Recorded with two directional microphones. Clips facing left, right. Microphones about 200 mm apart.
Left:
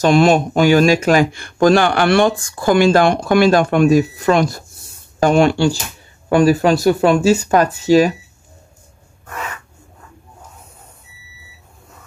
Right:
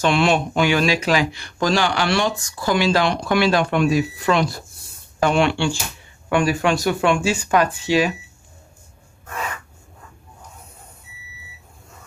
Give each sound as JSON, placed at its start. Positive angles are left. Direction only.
{"t": 0.0, "sound": "speech", "side_deg": 45}